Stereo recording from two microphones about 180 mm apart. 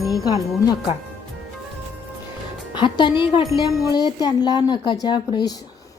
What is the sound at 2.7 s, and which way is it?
Speech, 25° left (ahead or behind).